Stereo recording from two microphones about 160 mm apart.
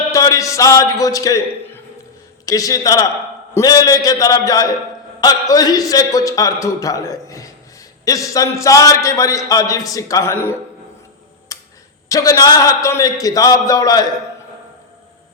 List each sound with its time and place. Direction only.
0.1 s a man's voice: 20° left (ahead or behind)
11.5 s tick: 20° left (ahead or behind)
12.0 s a man's voice: 20° left (ahead or behind)